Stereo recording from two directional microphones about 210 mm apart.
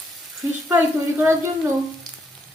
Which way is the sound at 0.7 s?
15° right (ahead or behind).